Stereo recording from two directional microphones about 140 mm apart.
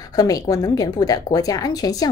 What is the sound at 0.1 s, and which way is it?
A woman's voice, 25° left (ahead or behind).